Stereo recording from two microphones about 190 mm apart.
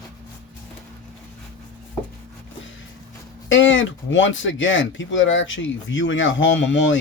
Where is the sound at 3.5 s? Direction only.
80° left.